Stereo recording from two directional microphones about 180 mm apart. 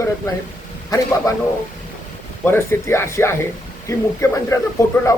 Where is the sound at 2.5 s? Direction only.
15° left (ahead or behind).